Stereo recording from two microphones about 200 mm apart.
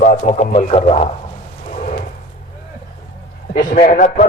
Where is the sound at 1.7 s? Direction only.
40° left (ahead or behind).